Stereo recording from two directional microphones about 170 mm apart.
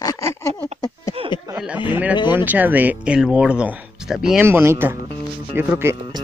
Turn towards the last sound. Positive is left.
turn(degrees=-15)  # may be behind; listen again after turning